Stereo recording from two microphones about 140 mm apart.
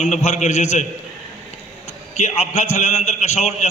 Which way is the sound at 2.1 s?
55° left (ahead or behind).